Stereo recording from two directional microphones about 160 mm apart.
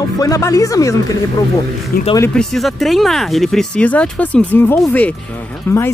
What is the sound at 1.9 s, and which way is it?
Speech, 65° left (ahead or behind).